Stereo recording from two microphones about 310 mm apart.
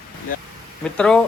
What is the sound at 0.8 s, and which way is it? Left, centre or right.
Speech, centre.